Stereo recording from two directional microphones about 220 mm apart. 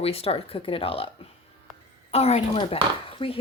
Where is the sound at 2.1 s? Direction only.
30° left (ahead or behind).